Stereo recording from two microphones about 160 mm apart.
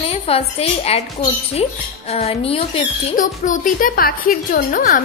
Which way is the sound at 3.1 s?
55° left (ahead or behind).